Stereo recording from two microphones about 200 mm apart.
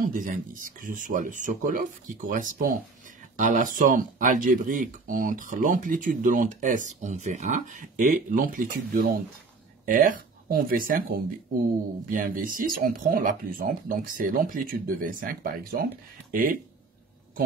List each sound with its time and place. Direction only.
0.0 s speech: 45° right (ahead or behind)